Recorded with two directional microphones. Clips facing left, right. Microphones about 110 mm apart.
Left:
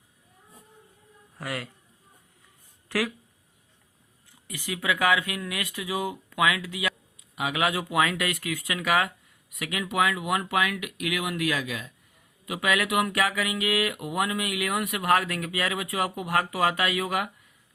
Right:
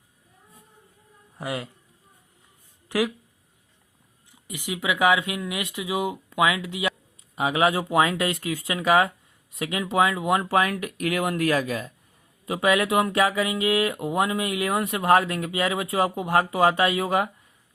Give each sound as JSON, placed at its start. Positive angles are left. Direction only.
{"t": 1.4, "sound": "speech", "side_deg": -20}
{"t": 2.9, "sound": "speech", "side_deg": -15}
{"t": 4.3, "sound": "speech", "side_deg": -20}
{"t": 12.5, "sound": "speech", "side_deg": -30}